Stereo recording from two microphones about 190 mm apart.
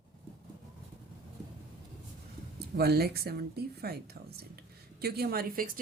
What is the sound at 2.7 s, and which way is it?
A woman's voice, 55° right (ahead or behind).